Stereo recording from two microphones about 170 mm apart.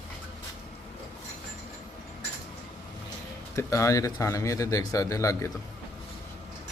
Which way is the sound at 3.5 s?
15° left (ahead or behind).